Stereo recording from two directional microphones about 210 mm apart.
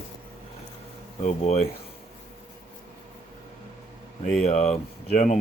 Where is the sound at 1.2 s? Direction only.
30° left (ahead or behind).